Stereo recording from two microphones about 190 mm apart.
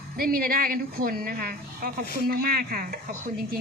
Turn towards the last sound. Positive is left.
turn(degrees=-50)  # may be behind; listen again after turning